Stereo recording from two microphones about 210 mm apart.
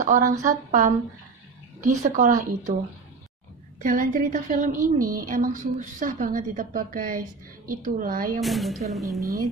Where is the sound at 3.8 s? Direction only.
40° right (ahead or behind).